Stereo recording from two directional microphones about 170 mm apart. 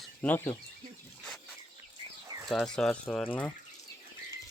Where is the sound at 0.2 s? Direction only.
10° left (ahead or behind).